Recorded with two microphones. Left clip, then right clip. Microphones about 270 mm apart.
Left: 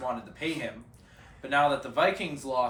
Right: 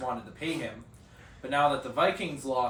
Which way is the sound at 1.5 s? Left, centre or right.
Centre.